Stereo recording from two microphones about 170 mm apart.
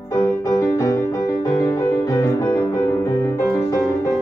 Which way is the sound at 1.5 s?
15° left (ahead or behind).